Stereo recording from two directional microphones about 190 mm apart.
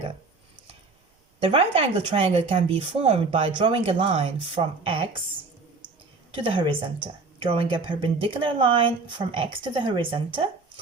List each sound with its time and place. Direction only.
1.4 s a woman's voice: 30° right (ahead or behind)
6.3 s a woman's voice: 25° right (ahead or behind)